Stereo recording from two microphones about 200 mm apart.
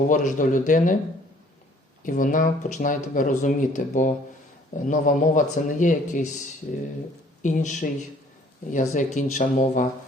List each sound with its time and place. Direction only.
0.1 s speech: 40° left (ahead or behind)
2.0 s speech: 40° left (ahead or behind)
7.4 s speech: 40° left (ahead or behind)